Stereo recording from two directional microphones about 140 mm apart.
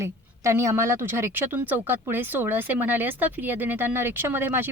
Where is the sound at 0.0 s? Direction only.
20° right (ahead or behind).